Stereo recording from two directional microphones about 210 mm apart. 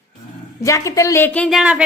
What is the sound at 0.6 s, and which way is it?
Speech, 15° left (ahead or behind).